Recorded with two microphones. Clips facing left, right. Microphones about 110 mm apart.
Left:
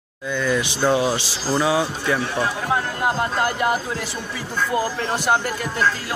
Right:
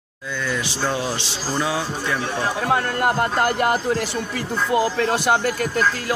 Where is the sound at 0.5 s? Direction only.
15° left (ahead or behind).